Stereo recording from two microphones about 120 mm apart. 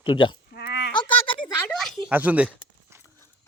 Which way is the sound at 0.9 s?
40° left (ahead or behind).